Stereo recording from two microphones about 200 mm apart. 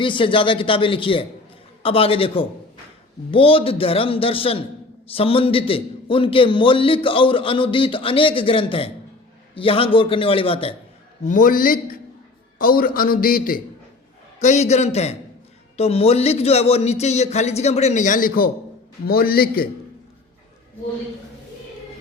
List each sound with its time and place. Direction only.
0.0 s a man's voice: 25° left (ahead or behind)
11.2 s a man's voice: 40° left (ahead or behind)